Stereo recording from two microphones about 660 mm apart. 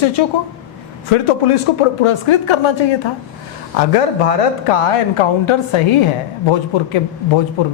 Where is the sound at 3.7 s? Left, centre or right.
Left.